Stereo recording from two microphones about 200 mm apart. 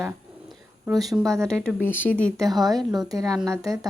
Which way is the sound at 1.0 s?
Centre (ahead or behind).